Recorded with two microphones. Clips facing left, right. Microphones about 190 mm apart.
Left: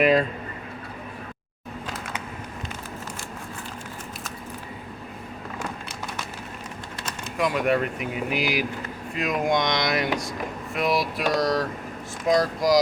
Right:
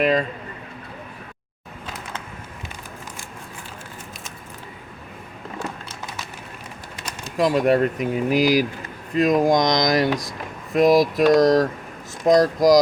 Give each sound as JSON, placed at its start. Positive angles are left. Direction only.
{"t": 0.0, "sound": "speech", "side_deg": 5}
{"t": 7.3, "sound": "speech", "side_deg": -35}